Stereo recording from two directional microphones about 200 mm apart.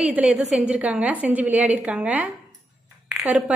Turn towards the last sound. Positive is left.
turn(degrees=-5)  # may be behind; listen again after turning